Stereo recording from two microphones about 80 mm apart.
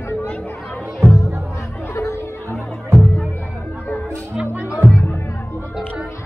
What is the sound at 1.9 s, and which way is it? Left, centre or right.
Music, left.